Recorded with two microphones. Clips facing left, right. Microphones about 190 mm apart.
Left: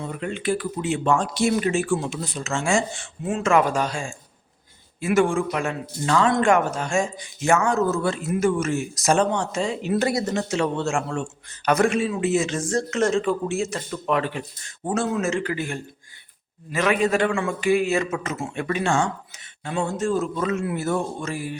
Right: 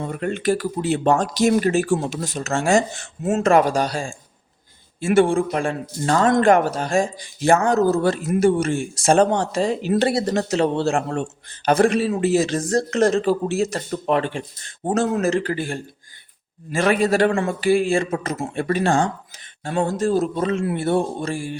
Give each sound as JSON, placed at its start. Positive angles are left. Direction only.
{"t": 0.0, "sound": "speech", "side_deg": -50}
{"t": 6.1, "sound": "speech", "side_deg": -45}
{"t": 14.2, "sound": "speech", "side_deg": -30}